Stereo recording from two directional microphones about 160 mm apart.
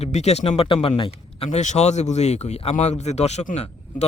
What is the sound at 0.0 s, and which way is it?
A man's voice, 45° left (ahead or behind).